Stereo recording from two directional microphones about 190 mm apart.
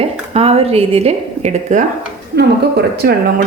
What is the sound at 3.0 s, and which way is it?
Speech, 55° right (ahead or behind).